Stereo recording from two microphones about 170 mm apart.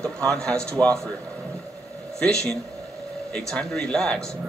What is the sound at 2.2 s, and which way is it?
A man's voice, 5° left (ahead or behind).